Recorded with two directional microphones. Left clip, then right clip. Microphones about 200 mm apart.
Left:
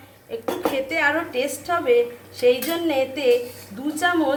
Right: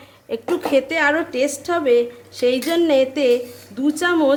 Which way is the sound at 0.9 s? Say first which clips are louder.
Right 3 dB; 50° right (ahead or behind).